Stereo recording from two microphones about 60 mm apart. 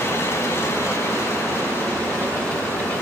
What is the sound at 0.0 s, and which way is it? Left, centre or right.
Vehicle, left.